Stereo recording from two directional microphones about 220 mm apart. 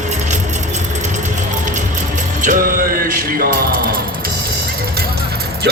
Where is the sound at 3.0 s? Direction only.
40° right (ahead or behind).